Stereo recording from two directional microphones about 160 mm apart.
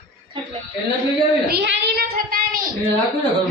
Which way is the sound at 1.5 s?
85° right.